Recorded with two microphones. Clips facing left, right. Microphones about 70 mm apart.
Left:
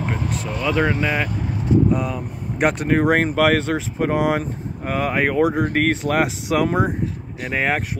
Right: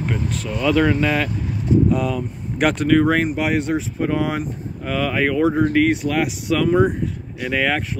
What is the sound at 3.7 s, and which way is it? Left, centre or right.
Speech, left.